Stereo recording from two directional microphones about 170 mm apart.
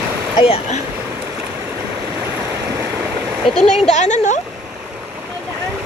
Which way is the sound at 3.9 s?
45° left (ahead or behind).